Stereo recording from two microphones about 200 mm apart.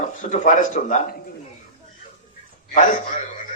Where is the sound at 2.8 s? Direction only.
40° left (ahead or behind).